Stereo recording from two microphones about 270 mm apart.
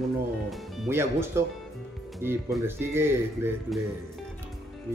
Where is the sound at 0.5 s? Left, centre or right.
Centre.